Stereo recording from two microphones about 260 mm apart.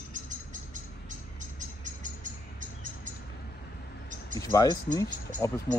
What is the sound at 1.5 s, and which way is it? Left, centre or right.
Music, right.